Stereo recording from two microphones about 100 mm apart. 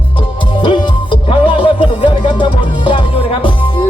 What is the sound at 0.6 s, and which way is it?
Music, 55° left (ahead or behind).